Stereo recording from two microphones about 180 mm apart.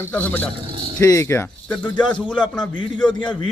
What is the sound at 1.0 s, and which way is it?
A man's voice, 15° left (ahead or behind).